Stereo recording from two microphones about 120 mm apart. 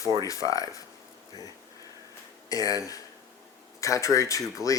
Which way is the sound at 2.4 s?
30° left (ahead or behind).